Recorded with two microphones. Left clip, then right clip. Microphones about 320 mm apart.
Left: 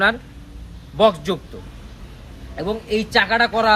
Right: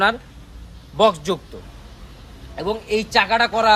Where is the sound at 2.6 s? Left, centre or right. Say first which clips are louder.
Right 1 dB; centre.